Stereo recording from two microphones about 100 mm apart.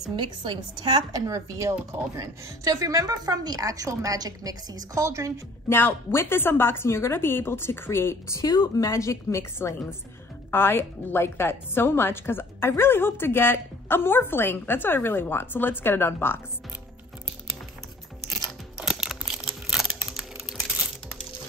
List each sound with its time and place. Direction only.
0.1 s speech: 50° right (ahead or behind); by 5.3 s 30° right (ahead or behind)
5.7 s a woman's voice: 20° left (ahead or behind)
18.3 s a sound: 5° right (ahead or behind)
20.4 s typing: 5° right (ahead or behind)